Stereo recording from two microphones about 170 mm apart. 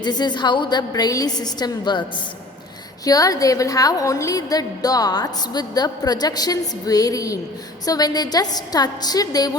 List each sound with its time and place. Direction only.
0.0 s a woman's voice: 25° left (ahead or behind)